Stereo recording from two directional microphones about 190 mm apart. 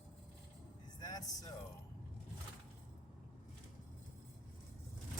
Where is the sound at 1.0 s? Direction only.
20° left (ahead or behind).